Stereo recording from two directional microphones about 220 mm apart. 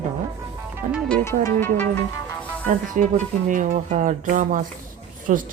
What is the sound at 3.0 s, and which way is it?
A woman's voice, 35° right (ahead or behind).